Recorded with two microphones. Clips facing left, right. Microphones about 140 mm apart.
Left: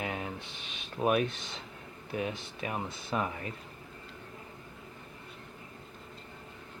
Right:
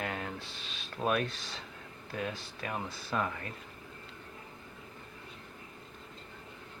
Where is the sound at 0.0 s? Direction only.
15° left (ahead or behind).